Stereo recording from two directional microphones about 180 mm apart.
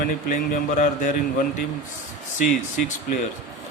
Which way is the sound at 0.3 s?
50° left (ahead or behind).